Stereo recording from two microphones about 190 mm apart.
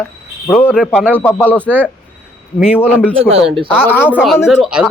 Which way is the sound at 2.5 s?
5° right (ahead or behind).